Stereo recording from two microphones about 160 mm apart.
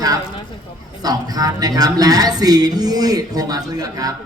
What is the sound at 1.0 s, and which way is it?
Speech, 25° right (ahead or behind).